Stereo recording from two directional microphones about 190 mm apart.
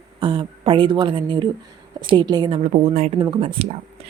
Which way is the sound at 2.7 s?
40° right (ahead or behind).